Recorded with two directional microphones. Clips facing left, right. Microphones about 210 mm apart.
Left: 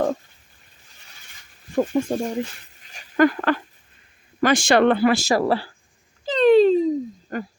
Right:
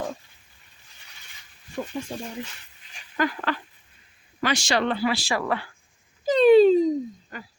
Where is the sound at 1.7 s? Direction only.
50° left (ahead or behind); by 5.7 s 35° left (ahead or behind).